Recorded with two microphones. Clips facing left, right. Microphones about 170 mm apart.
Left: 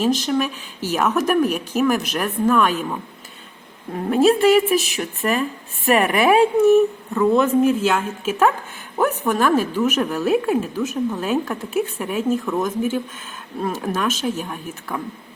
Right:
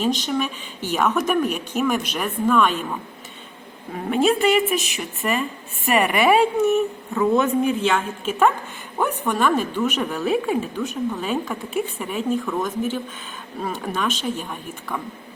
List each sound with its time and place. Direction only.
0.0 s speech: centre (ahead or behind)
4.1 s speech: centre (ahead or behind)